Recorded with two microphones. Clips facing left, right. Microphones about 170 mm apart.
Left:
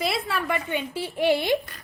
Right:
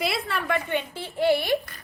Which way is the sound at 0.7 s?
10° left (ahead or behind).